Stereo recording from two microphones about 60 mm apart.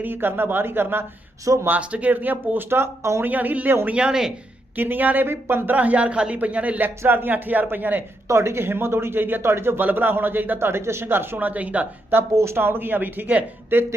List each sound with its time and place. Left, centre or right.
0.0 s a woman's voice: right
1.5 s speech: right
1.8 s a man's voice: right
2.6 s speech: right
3.2 s a man's voice: right
3.8 s speech: centre
4.8 s a woman's voice: right
5.7 s a man's voice: right
8.3 s a woman's voice: right
10.6 s a woman's voice: right
12.3 s a woman's voice: right